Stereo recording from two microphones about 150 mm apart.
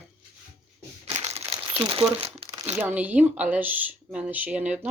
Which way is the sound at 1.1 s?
40° right (ahead or behind).